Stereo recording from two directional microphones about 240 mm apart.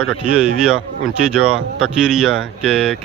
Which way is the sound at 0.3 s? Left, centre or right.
Centre.